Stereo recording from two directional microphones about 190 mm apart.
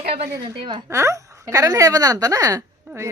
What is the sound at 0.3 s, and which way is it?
Speech, 20° right (ahead or behind).